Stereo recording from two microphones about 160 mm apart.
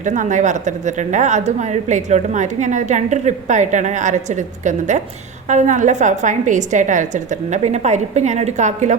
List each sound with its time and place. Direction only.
0.0 s a woman's voice: 50° right (ahead or behind)